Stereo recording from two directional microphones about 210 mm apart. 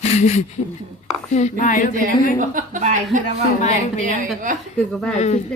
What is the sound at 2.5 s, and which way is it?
Speech, 40° right (ahead or behind).